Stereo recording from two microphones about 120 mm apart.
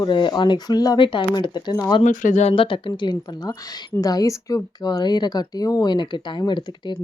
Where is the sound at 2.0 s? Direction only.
90° left.